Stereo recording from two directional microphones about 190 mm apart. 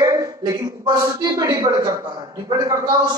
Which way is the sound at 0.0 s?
20° right (ahead or behind).